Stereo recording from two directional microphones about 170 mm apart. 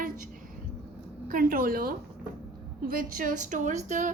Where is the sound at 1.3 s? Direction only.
55° right (ahead or behind).